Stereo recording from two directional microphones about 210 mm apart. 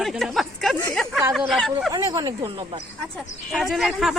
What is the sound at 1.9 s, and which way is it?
Speech, 20° right (ahead or behind).